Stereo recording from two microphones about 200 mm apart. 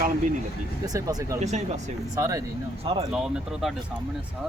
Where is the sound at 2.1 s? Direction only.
15° right (ahead or behind).